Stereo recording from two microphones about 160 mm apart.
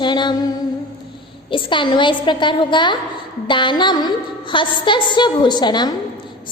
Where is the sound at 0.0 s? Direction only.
30° left (ahead or behind).